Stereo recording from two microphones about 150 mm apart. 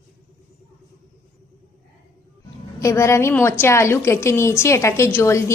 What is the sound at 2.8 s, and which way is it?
A woman's voice, 20° left (ahead or behind).